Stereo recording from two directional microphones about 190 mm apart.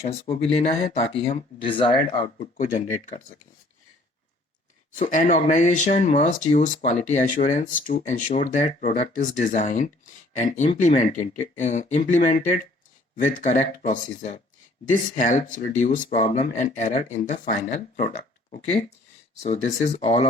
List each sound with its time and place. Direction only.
0.0 s speech: 30° left (ahead or behind)
2.4 s speech: 40° left (ahead or behind)
4.9 s speech: 40° left (ahead or behind)